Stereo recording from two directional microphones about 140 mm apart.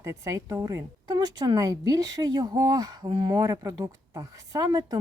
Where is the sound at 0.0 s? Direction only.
20° right (ahead or behind).